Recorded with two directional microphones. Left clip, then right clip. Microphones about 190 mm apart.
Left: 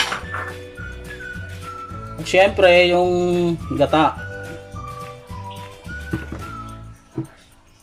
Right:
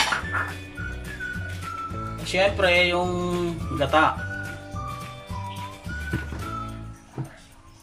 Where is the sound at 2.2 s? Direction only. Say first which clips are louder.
Left 8 dB; 35° left (ahead or behind).